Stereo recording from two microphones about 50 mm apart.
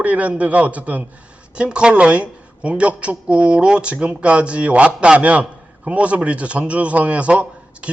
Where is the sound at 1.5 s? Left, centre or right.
Right.